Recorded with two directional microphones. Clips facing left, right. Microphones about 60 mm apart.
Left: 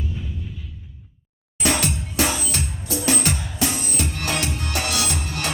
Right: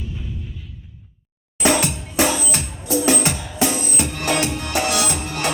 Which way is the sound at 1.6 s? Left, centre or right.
Right.